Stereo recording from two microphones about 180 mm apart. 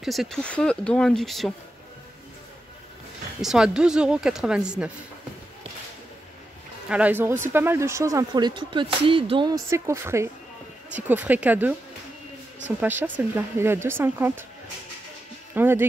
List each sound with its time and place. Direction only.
0.0 s speech: centre (ahead or behind)
3.3 s speech: 5° right (ahead or behind)
6.9 s speech: 10° right (ahead or behind); by 9.6 s 25° right (ahead or behind)
9.7 s speech: 15° right (ahead or behind)
15.5 s speech: 10° right (ahead or behind)